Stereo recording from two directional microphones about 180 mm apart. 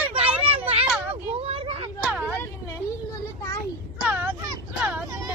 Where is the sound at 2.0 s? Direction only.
10° right (ahead or behind).